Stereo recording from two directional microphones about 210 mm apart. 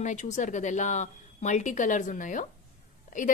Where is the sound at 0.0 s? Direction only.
35° left (ahead or behind).